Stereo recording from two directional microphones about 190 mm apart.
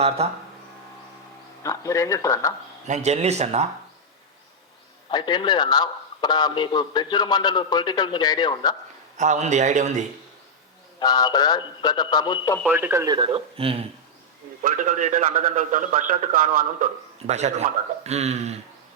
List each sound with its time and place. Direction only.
0.2 s a man's voice: 35° right (ahead or behind)
1.6 s speech: 15° left (ahead or behind)
2.8 s a man's voice: 35° right (ahead or behind)
5.1 s a man's voice: 25° left (ahead or behind)
9.1 s a man's voice: 40° right (ahead or behind)
11.0 s a man's voice: 20° left (ahead or behind)
12.6 s speech: 10° right (ahead or behind); by 13.8 s 30° right (ahead or behind)
14.6 s a man's voice: 45° right (ahead or behind)